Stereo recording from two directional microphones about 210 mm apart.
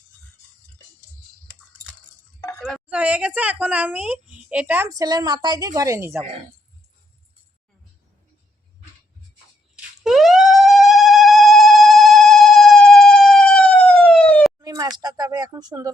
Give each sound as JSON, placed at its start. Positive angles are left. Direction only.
{"t": 2.4, "sound": "chink", "side_deg": 10}
{"t": 2.7, "sound": "a woman's voice", "side_deg": -5}
{"t": 10.0, "sound": "siren", "side_deg": 0}
{"t": 14.6, "sound": "speech", "side_deg": -15}